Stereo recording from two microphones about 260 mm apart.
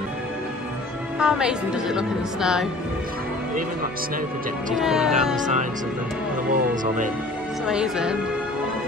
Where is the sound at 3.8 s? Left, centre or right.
Right.